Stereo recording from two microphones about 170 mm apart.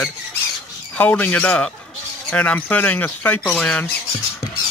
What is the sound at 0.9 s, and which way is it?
Speech, 10° left (ahead or behind).